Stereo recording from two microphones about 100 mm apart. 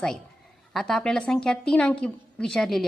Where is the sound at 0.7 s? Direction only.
5° left (ahead or behind).